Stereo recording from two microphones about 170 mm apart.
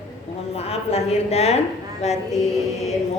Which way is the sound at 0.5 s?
35° left (ahead or behind).